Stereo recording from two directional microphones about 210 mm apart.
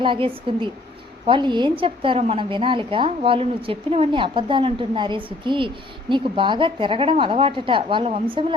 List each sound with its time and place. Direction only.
0.0 s a woman's voice: 25° right (ahead or behind)